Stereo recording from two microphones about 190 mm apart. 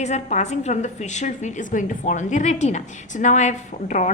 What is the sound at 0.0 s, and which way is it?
A woman's voice, 35° left (ahead or behind).